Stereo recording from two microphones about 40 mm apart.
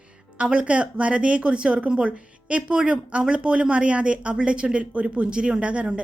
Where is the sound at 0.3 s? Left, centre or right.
Right.